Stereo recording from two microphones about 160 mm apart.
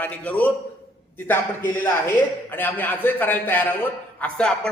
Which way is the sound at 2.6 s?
10° left (ahead or behind).